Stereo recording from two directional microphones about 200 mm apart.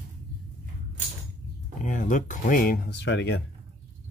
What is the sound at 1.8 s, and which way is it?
Speech, 40° left (ahead or behind).